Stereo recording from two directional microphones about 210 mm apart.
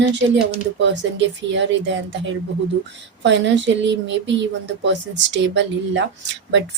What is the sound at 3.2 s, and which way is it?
Speech, 60° right (ahead or behind).